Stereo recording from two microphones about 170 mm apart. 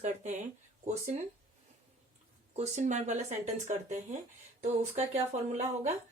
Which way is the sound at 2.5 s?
40° right (ahead or behind).